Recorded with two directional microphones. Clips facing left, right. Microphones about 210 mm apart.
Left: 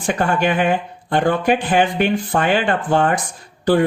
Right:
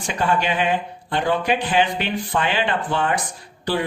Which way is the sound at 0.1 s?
50° left (ahead or behind).